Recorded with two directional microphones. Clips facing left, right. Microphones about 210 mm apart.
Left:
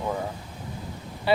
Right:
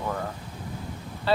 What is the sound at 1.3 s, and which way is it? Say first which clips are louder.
Speech: left 2 dB; 15° left (ahead or behind).